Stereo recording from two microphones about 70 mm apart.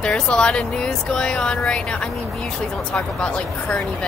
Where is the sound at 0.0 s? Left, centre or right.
Centre.